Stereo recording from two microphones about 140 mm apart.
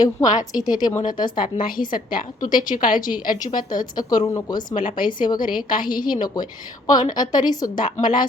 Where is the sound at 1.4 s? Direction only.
85° left.